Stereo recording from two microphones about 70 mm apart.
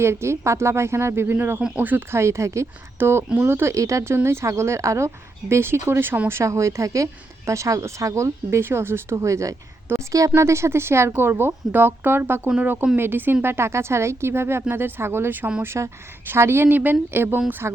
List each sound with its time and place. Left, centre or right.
0.0 s a woman's voice: right
2.1 s speech: right
3.0 s a woman's voice: right
6.4 s speech: right
9.1 s a woman's voice: right